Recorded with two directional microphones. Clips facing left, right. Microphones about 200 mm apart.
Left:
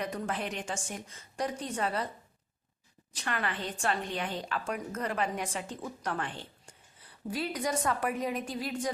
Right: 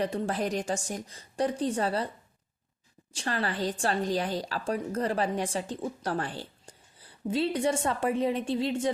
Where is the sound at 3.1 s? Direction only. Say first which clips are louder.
Right 4 dB; 30° right (ahead or behind).